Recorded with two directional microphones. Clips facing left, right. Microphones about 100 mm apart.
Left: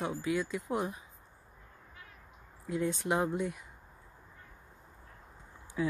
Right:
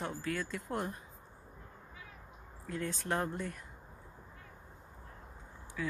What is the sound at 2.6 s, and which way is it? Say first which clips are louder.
Speech: left 5 dB; 15° left (ahead or behind).